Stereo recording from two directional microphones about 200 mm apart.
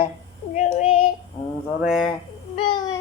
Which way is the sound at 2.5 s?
25° left (ahead or behind).